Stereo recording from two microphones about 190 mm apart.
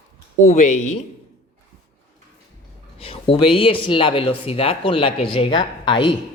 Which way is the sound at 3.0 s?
30° left (ahead or behind).